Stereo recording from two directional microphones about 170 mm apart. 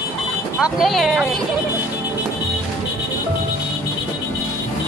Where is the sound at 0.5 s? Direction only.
5° right (ahead or behind).